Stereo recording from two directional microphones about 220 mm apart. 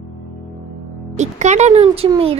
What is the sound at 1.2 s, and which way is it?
Speech, 30° right (ahead or behind).